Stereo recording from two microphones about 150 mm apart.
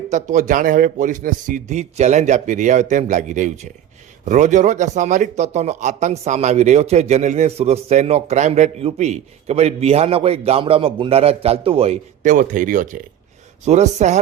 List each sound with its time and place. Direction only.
0.1 s a man's voice: 60° right (ahead or behind); by 11.9 s 40° right (ahead or behind)
12.2 s a man's voice: 60° right (ahead or behind)